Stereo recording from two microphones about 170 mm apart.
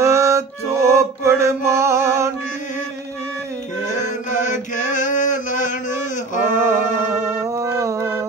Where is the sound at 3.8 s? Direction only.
45° left (ahead or behind).